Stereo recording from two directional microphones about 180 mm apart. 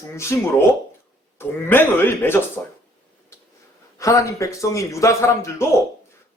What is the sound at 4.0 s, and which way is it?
A man's voice, 15° left (ahead or behind).